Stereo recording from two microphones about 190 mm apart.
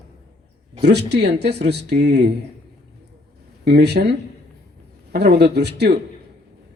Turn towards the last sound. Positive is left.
turn(degrees=-60)  # may be behind; listen again after turning